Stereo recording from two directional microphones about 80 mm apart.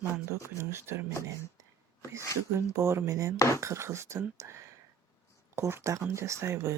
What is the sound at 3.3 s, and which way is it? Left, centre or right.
Dishes, left.